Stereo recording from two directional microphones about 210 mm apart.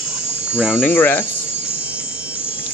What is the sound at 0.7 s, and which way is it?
Speech, 10° left (ahead or behind).